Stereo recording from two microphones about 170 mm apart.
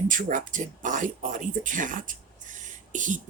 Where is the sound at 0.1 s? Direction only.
50° right (ahead or behind).